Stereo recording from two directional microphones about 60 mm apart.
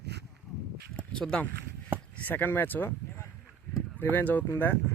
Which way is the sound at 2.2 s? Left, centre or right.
Left.